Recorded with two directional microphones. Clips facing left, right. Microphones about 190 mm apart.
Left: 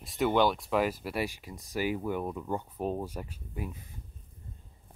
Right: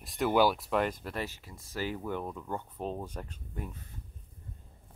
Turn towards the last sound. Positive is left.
turn(degrees=10)  # may be behind; listen again after turning